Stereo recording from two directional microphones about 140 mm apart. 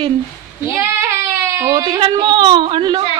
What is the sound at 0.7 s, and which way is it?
Speech, 20° right (ahead or behind).